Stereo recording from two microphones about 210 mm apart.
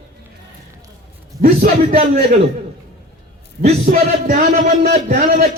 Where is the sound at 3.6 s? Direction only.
35° right (ahead or behind).